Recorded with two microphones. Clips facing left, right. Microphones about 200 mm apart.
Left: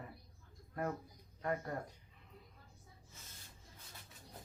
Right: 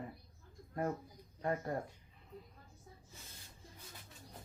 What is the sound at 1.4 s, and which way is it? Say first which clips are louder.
Speech: right 2 dB; 30° right (ahead or behind).